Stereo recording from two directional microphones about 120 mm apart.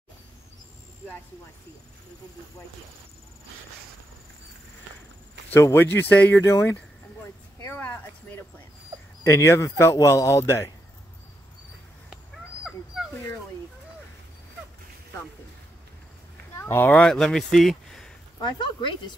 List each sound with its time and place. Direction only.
5.5 s a man's voice: 20° left (ahead or behind)
7.6 s a sound: 15° left (ahead or behind)
9.2 s a man's voice: 25° left (ahead or behind)
16.5 s speech: 20° left (ahead or behind)
17.0 s speech: 5° left (ahead or behind)